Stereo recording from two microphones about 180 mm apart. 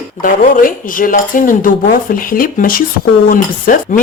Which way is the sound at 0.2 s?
50° left (ahead or behind).